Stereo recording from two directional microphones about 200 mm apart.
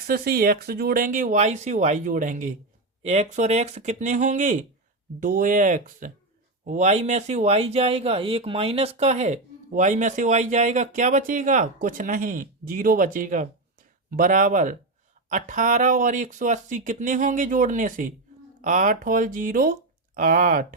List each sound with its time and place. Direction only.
0.1 s speech: 50° right (ahead or behind)